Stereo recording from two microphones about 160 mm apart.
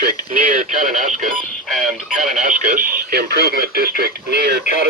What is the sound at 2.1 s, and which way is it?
Speech, 55° right (ahead or behind).